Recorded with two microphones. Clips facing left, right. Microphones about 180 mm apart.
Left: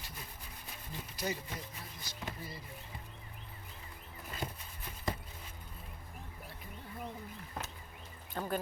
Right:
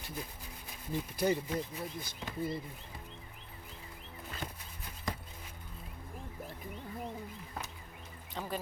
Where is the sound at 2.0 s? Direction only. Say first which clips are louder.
Right 4 dB; 55° right (ahead or behind).